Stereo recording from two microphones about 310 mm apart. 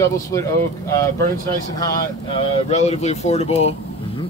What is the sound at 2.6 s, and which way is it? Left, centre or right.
Speech, left.